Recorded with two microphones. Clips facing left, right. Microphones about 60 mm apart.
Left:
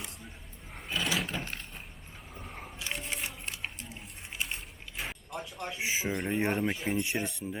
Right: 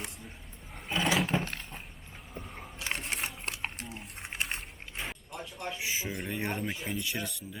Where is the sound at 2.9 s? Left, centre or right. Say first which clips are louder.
Right 1 dB; right.